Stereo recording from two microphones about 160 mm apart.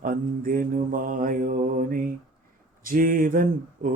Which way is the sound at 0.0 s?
60° right (ahead or behind).